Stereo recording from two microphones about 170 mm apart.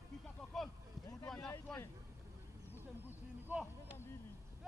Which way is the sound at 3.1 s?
10° right (ahead or behind).